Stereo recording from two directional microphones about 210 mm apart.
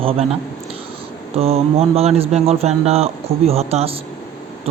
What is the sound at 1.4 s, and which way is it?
A man's voice, 30° right (ahead or behind).